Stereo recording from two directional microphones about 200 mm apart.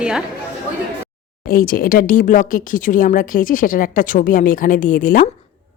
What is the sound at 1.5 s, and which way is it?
Speech, 45° left (ahead or behind).